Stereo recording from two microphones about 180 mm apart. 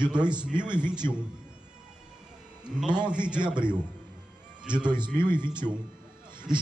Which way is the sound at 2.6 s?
5° right (ahead or behind).